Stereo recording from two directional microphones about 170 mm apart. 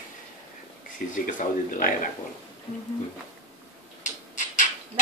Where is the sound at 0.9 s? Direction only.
50° left (ahead or behind).